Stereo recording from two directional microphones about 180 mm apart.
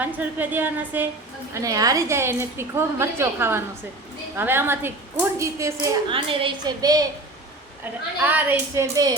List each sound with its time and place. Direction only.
0.0 s a woman's voice: 10° right (ahead or behind)
6.1 s a woman's voice: 30° right (ahead or behind)
8.2 s a woman's voice: 10° right (ahead or behind)